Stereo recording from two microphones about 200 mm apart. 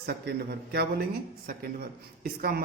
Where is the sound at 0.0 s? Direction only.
55° right (ahead or behind).